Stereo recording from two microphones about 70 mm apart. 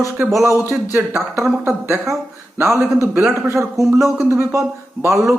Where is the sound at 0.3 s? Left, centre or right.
Right.